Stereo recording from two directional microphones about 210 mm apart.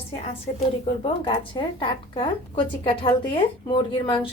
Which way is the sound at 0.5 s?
30° left (ahead or behind).